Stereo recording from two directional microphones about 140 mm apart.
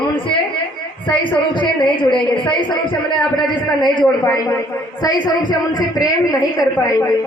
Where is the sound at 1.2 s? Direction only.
35° left (ahead or behind).